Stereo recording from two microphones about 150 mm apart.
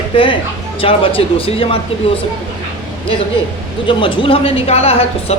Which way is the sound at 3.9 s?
35° left (ahead or behind).